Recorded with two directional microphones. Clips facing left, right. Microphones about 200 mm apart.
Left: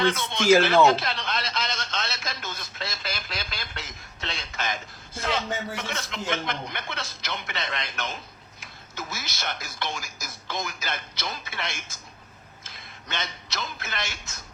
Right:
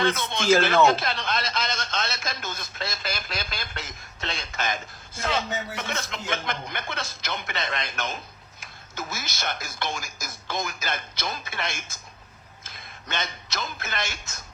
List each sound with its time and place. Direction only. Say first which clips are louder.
0.0 s speech: even; 50° right (ahead or behind)
0.9 s radio: even; 50° right (ahead or behind)
8.6 s a man's voice: right 2 dB; 45° right (ahead or behind)